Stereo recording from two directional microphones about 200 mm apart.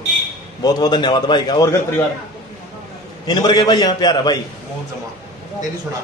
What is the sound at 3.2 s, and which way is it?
A man's voice, 20° left (ahead or behind).